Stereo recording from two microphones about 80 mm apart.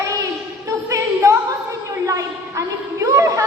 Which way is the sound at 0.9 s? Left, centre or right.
Right.